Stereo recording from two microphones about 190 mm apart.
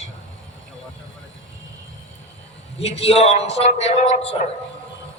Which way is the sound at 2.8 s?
35° left (ahead or behind).